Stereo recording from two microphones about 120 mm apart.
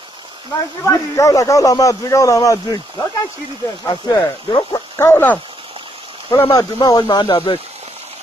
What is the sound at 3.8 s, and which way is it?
Speech, 30° left (ahead or behind).